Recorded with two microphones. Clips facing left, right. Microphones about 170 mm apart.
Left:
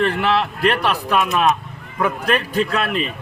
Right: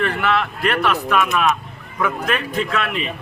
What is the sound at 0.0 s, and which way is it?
Speech, 30° left (ahead or behind).